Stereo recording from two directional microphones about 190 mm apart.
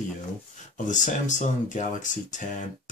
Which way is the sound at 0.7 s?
40° left (ahead or behind).